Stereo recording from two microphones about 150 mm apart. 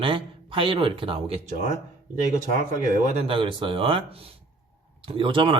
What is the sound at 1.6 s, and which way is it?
Speech, 60° right (ahead or behind).